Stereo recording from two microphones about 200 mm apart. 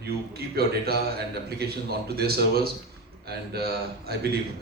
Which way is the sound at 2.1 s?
50° right (ahead or behind).